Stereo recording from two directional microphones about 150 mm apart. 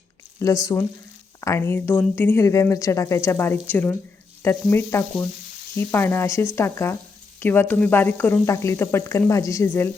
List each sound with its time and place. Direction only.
0.3 s speech: 20° left (ahead or behind)